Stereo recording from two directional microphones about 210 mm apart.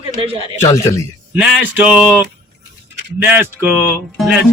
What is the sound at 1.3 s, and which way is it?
Speech, 10° right (ahead or behind).